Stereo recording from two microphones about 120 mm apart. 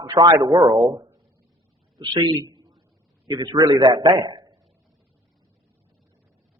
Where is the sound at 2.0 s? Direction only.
35° right (ahead or behind).